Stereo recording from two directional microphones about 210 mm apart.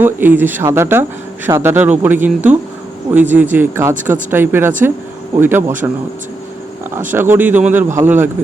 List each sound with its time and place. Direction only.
0.0 s speech: 10° right (ahead or behind)
6.9 s speech: 10° right (ahead or behind)